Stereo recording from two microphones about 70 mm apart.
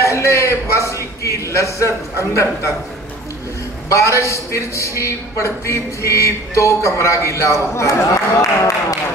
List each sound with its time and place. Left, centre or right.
0.0 s a man's voice: left
3.9 s a man's voice: left